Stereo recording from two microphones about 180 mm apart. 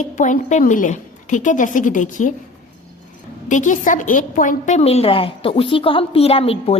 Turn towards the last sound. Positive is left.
turn(degrees=35)  # may be behind; listen again after turning